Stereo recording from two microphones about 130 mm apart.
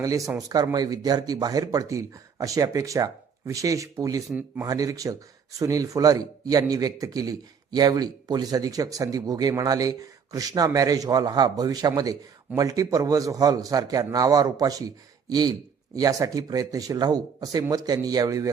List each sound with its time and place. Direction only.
0.0 s speech: 25° right (ahead or behind)
4.3 s a man's voice: 15° right (ahead or behind)
4.6 s speech: 25° right (ahead or behind)